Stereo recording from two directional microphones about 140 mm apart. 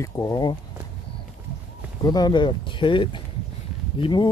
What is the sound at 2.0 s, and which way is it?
Speech, 30° left (ahead or behind).